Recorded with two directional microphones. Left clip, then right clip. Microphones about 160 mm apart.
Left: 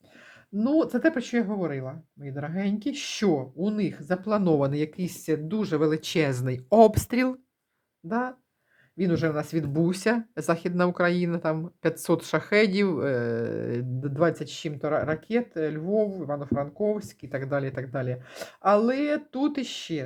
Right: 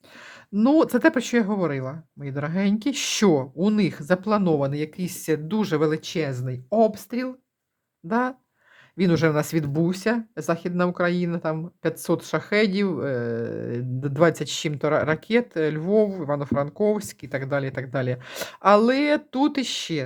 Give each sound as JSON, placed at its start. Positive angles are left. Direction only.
{"t": 0.5, "sound": "speech", "side_deg": -35}
{"t": 4.3, "sound": "speech", "side_deg": -10}
{"t": 4.5, "sound": "speech", "side_deg": 0}
{"t": 5.5, "sound": "speech", "side_deg": -20}
{"t": 5.9, "sound": "speech", "side_deg": 10}
{"t": 8.0, "sound": "speech", "side_deg": -15}
{"t": 9.0, "sound": "speech", "side_deg": -30}
{"t": 9.6, "sound": "speech", "side_deg": -5}
{"t": 14.0, "sound": "speech", "side_deg": -20}
{"t": 17.2, "sound": "speech", "side_deg": -10}
{"t": 18.0, "sound": "speech", "side_deg": -25}